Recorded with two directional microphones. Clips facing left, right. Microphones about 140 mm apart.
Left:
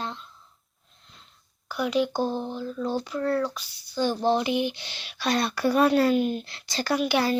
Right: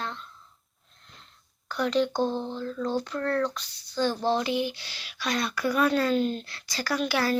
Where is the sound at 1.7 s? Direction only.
10° left (ahead or behind); by 5.9 s 30° left (ahead or behind).